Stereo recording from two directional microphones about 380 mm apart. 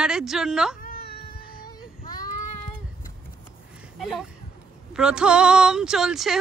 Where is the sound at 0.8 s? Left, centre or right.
Left.